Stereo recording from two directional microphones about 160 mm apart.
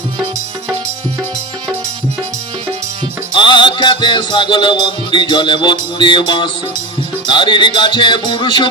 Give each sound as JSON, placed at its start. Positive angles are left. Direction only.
{"t": 3.3, "sound": "music", "side_deg": 30}